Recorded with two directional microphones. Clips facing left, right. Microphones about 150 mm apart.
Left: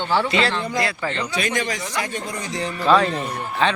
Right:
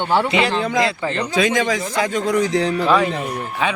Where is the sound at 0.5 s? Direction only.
90° right.